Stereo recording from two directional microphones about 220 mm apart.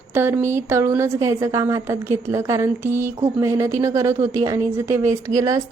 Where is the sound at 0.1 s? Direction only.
10° right (ahead or behind).